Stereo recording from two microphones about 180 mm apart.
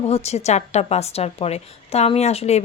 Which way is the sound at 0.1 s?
35° left (ahead or behind).